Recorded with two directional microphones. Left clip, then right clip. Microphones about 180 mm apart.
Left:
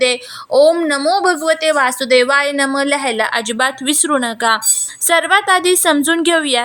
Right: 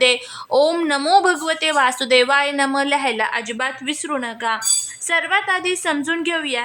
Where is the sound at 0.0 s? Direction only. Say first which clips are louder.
Left 1 dB; 10° left (ahead or behind).